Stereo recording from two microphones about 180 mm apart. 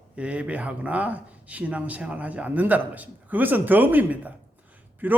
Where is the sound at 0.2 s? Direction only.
5° right (ahead or behind).